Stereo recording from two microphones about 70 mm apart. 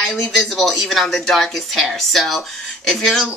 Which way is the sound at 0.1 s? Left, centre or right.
Centre.